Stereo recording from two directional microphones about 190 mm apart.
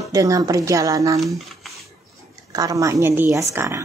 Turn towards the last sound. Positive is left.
turn(degrees=-15)  # may be behind; listen again after turning